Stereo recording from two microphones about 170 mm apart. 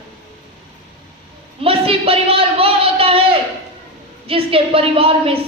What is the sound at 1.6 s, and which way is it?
A man's voice, 35° right (ahead or behind).